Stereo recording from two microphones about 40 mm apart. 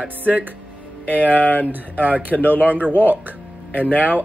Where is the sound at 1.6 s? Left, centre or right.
Right.